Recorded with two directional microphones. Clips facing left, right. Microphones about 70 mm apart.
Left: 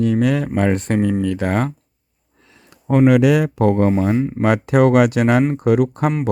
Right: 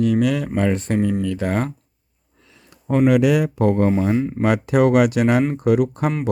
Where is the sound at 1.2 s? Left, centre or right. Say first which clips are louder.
Left 3 dB; left.